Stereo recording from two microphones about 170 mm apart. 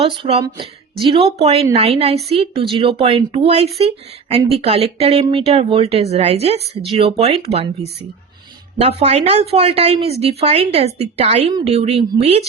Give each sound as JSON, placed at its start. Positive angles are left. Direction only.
{"t": 0.4, "sound": "a woman's voice", "side_deg": -25}